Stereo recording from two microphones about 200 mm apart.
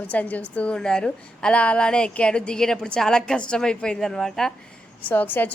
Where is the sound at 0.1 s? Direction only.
5° left (ahead or behind).